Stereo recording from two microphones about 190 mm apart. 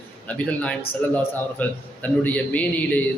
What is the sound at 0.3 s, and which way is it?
A man's voice, 5° left (ahead or behind).